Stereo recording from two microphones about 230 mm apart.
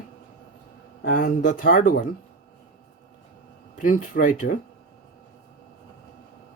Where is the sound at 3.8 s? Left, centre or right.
Left.